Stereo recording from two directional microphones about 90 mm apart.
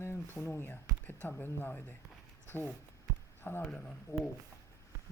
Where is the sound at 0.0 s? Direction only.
30° left (ahead or behind).